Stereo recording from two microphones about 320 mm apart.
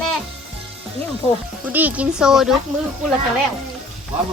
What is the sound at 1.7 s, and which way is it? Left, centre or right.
Speech, centre.